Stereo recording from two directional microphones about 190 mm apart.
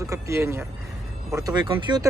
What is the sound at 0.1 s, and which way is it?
A man's voice, 15° right (ahead or behind).